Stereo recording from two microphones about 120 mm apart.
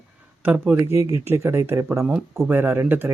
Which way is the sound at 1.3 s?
20° right (ahead or behind).